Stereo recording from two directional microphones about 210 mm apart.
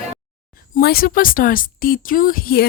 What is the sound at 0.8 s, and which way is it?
Speech, 45° left (ahead or behind).